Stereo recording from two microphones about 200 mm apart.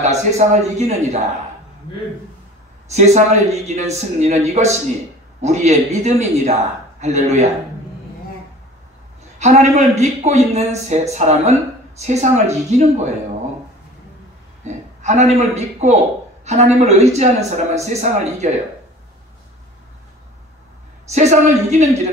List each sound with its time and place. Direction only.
0.0 s speech: 35° right (ahead or behind)
2.9 s speech: 35° right (ahead or behind)
9.4 s speech: 35° right (ahead or behind)
14.6 s a man's voice: 35° right (ahead or behind)
21.1 s speech: 35° right (ahead or behind)